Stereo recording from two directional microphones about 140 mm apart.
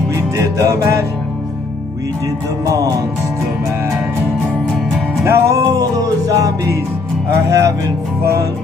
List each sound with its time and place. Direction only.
0.1 s music: 20° right (ahead or behind)
5.3 s music: 20° right (ahead or behind)